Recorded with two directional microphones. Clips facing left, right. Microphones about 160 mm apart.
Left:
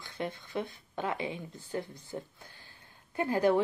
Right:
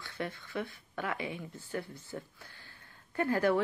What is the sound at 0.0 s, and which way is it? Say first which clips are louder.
Speech: left 2 dB; 20° left (ahead or behind).